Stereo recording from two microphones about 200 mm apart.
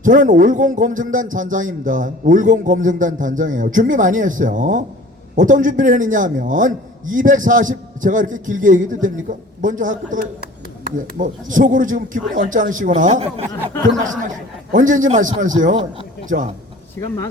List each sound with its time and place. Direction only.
0.0 s a man's voice: 40° right (ahead or behind)
17.0 s speech: 10° left (ahead or behind)